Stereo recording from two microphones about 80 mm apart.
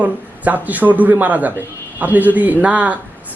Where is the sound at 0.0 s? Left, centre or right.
Centre.